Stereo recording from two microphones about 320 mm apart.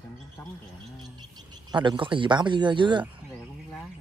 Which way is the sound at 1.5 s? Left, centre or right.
Centre.